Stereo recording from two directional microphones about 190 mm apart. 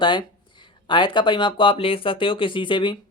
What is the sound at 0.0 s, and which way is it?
Speech, 25° left (ahead or behind).